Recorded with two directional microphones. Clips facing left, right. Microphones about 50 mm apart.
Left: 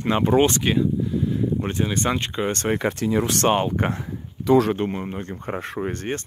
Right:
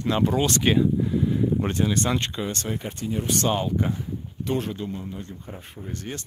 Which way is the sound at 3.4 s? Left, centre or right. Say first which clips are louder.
Left 2 dB; left.